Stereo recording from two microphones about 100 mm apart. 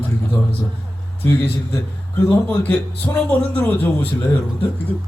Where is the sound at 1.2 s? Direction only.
25° left (ahead or behind).